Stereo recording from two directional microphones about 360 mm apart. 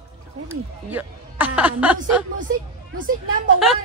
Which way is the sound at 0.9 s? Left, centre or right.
Centre.